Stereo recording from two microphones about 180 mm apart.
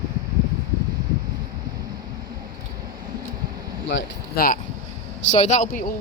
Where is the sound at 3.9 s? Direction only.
90° left.